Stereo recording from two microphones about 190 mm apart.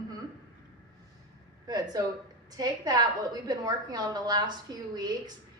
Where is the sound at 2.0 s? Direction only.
20° right (ahead or behind).